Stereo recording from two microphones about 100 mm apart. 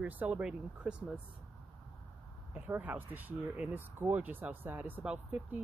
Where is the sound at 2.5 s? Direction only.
15° right (ahead or behind).